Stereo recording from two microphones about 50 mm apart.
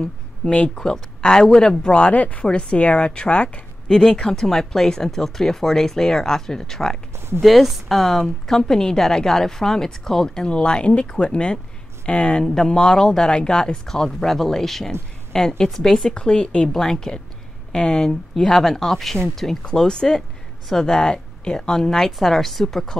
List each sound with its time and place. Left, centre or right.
0.7 s a woman's voice: centre
7.4 s a woman's voice: centre